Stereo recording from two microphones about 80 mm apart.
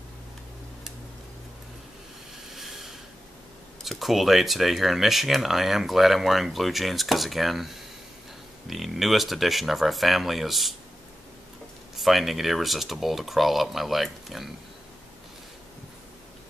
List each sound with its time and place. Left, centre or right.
2.5 s a sound: centre
3.8 s speech: centre
12.0 s speech: centre